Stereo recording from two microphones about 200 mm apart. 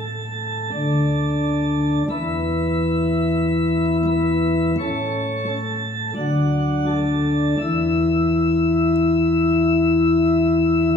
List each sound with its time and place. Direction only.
2.5 s music: 15° left (ahead or behind)
7.3 s organ: 30° left (ahead or behind)